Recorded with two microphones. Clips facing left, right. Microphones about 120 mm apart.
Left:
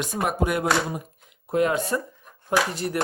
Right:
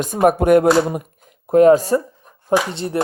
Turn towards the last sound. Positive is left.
turn(degrees=-25)  # may be behind; listen again after turning